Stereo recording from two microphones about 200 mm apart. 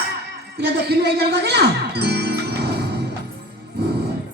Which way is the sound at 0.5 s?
55° right (ahead or behind).